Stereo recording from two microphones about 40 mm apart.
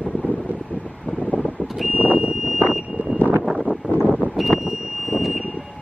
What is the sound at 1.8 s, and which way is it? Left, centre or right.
Vehicle, right.